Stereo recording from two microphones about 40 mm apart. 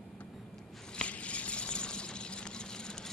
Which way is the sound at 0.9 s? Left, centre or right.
Left.